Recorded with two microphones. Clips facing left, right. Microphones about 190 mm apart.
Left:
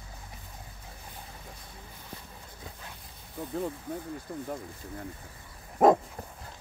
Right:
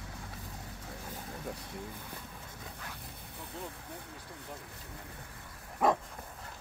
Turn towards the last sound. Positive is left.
turn(degrees=45)  # may be behind; listen again after turning